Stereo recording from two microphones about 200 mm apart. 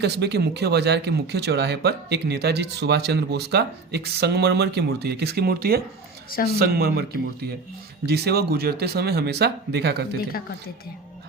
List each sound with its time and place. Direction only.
0.0 s speech: 55° right (ahead or behind)
8.0 s speech: 55° right (ahead or behind)